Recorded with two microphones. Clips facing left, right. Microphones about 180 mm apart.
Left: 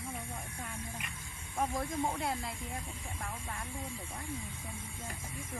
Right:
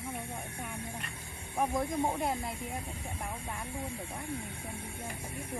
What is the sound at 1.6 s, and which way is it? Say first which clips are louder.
Speech: right 3 dB; 20° right (ahead or behind).